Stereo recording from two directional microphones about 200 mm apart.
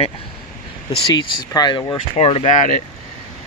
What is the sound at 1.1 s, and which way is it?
Speech, 20° left (ahead or behind).